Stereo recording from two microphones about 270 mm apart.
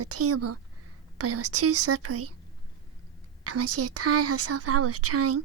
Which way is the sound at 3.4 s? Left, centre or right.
Right.